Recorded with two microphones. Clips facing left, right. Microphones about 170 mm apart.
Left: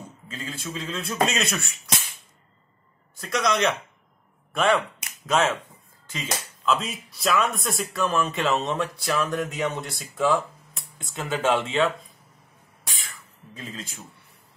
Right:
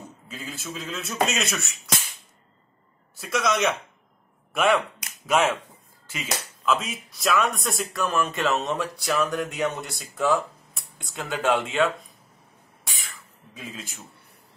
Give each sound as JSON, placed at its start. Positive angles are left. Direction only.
{"t": 0.3, "sound": "speech", "side_deg": -5}
{"t": 3.2, "sound": "speech", "side_deg": -5}
{"t": 12.8, "sound": "a sound", "side_deg": 0}